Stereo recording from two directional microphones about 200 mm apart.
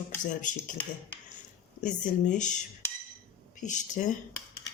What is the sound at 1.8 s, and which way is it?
Speech, 40° left (ahead or behind).